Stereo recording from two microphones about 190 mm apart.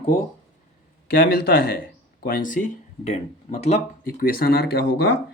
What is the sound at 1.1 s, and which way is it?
Speech, 55° left (ahead or behind).